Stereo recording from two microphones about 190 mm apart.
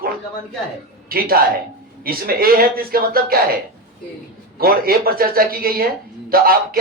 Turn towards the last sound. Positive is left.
turn(degrees=-50)  # may be behind; listen again after turning